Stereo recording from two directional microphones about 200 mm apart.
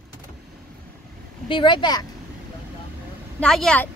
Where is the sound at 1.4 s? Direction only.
25° left (ahead or behind).